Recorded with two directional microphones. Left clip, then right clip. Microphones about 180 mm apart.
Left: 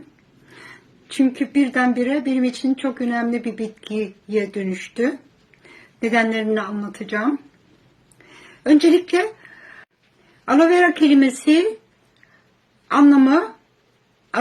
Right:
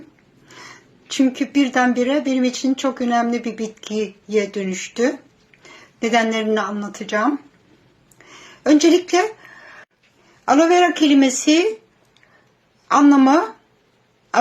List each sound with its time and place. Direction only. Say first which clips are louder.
0.4 s speech: right 2 dB; 25° left (ahead or behind)
8.2 s a sound: right 3 dB; 20° left (ahead or behind)
8.6 s speech: even; 20° left (ahead or behind)
10.4 s speech: right 1 dB; 20° left (ahead or behind)
12.9 s speech: right 1 dB; 25° left (ahead or behind)